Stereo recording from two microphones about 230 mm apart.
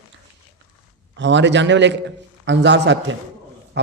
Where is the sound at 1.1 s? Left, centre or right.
Right.